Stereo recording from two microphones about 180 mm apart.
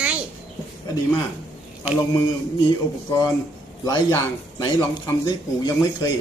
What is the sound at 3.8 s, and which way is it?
Speech, 20° left (ahead or behind).